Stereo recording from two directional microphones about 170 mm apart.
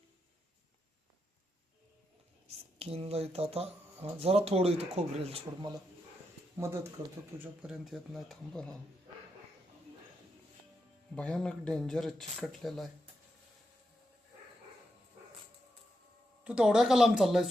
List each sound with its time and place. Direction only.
2.7 s speech: 35° right (ahead or behind)
7.3 s speech: 10° right (ahead or behind)
11.1 s speech: 5° left (ahead or behind)
16.4 s speech: 5° right (ahead or behind)